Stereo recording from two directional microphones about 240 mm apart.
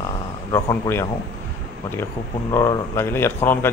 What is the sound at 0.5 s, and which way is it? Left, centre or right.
Speech, centre.